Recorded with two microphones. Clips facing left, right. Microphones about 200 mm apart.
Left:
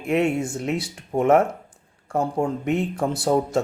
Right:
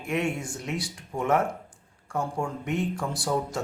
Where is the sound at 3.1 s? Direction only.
25° left (ahead or behind).